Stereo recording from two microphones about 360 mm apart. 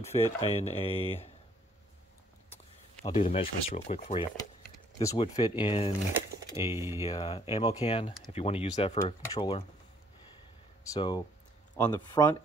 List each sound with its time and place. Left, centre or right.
0.0 s speech: centre
3.0 s speech: centre
6.7 s speech: centre
7.1 s speech: centre
10.9 s speech: centre